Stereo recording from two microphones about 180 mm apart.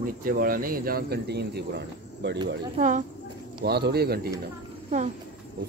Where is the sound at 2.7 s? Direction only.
40° right (ahead or behind).